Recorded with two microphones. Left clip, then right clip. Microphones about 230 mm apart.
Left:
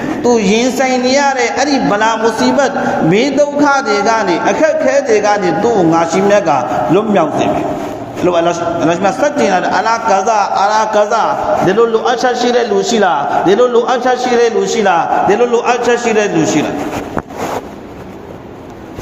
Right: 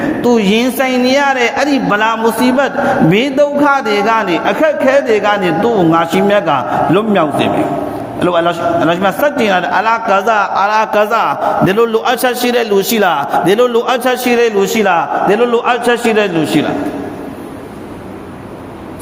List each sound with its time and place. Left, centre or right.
0.3 s a man's voice: right